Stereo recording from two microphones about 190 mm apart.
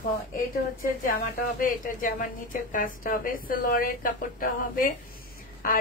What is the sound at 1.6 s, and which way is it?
A woman's voice, 45° left (ahead or behind).